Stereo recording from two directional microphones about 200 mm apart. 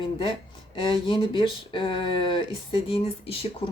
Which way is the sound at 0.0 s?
25° left (ahead or behind).